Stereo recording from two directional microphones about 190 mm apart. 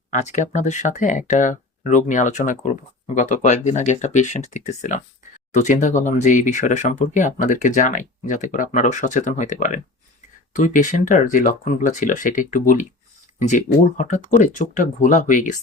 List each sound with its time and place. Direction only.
0.1 s speech: 40° left (ahead or behind)